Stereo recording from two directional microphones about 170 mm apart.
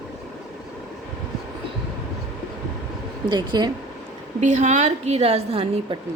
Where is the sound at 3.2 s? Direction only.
25° right (ahead or behind).